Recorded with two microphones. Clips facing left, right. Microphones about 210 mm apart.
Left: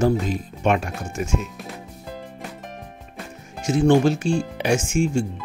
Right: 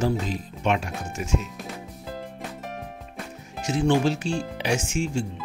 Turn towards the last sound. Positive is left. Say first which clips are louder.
# left 5 dB
turn(degrees=50)  # may be behind; listen again after turning